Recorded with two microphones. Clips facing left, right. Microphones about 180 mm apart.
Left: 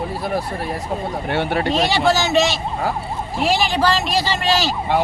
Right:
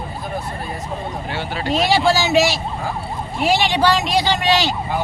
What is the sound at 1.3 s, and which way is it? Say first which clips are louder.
Speech: left 9 dB; 60° left (ahead or behind).